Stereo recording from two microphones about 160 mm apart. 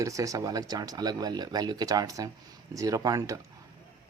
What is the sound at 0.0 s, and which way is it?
Speech, 20° right (ahead or behind).